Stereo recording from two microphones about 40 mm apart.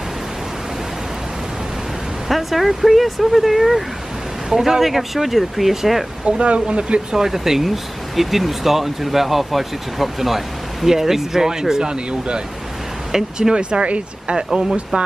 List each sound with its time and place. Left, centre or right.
2.2 s speech: centre
6.2 s speech: right
7.1 s speech: centre; by 14.3 s right
14.3 s speech: centre